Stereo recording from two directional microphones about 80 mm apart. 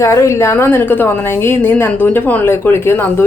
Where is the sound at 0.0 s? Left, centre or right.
Left.